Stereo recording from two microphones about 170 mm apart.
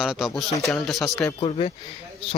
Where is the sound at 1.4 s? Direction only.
35° left (ahead or behind).